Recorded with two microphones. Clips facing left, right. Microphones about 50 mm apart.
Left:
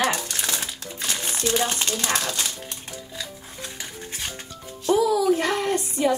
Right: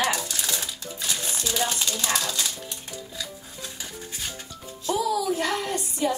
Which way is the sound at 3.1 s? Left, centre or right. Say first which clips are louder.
Left 1 dB; left.